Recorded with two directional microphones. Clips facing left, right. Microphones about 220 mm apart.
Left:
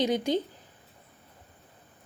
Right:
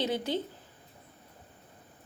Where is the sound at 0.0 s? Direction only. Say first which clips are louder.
Left 5 dB; 15° left (ahead or behind).